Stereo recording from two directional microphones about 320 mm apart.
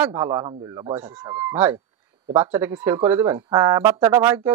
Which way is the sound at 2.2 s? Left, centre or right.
Centre.